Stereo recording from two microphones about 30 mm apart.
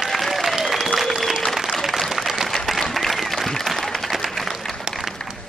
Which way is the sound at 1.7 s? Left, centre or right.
Centre.